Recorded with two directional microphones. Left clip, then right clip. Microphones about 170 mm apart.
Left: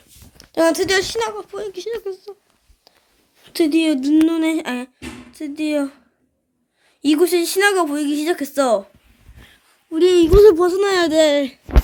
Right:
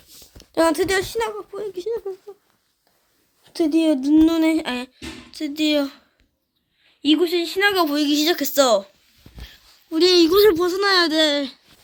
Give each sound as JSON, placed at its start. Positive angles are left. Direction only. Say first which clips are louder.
{"t": 0.5, "sound": "speech", "louder": "left 2 dB", "side_deg": -15}
{"t": 3.4, "sound": "speech", "louder": "left 2 dB", "side_deg": -5}
{"t": 7.0, "sound": "speech", "louder": "left 3 dB", "side_deg": 15}
{"t": 7.9, "sound": "speech", "louder": "right 1 dB", "side_deg": 5}
{"t": 9.4, "sound": "a sound", "louder": "right 4 dB", "side_deg": 0}
{"t": 10.3, "sound": "speech", "louder": "left 5 dB", "side_deg": -20}
{"t": 10.6, "sound": "speech", "louder": "left 2 dB", "side_deg": 0}